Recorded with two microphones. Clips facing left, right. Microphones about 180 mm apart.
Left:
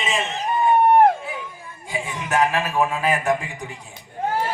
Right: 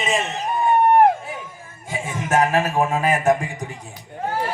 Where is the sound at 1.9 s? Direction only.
45° right (ahead or behind).